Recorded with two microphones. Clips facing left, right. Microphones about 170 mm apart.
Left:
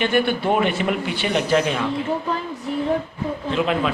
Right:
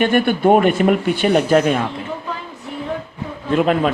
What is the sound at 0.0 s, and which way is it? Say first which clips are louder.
Speech: right 5 dB; 50° right (ahead or behind).